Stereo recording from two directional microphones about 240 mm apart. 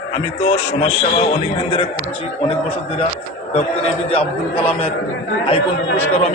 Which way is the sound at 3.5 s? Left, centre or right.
Left.